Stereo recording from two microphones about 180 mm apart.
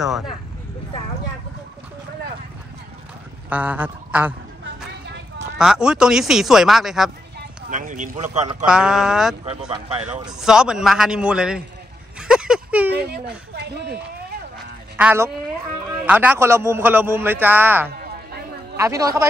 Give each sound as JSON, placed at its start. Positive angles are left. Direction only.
{"t": 0.0, "sound": "speech", "side_deg": 0}
{"t": 3.4, "sound": "speech", "side_deg": -10}
{"t": 5.6, "sound": "speech", "side_deg": -5}
{"t": 7.7, "sound": "speech", "side_deg": -45}
{"t": 8.6, "sound": "speech", "side_deg": -5}
{"t": 9.7, "sound": "speech", "side_deg": -35}
{"t": 10.4, "sound": "speech", "side_deg": -5}
{"t": 12.2, "sound": "a sound", "side_deg": -5}
{"t": 12.9, "sound": "speech", "side_deg": -65}
{"t": 15.0, "sound": "a man's voice", "side_deg": -10}